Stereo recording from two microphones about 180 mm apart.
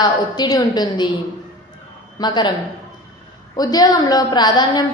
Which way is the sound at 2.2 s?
25° left (ahead or behind).